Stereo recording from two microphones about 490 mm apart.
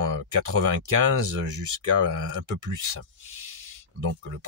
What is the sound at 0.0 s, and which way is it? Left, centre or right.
Speech, right.